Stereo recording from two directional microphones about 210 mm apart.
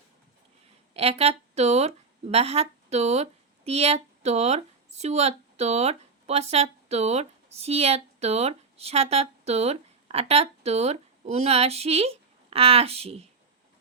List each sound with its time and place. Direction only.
0.9 s a woman's voice: 30° right (ahead or behind)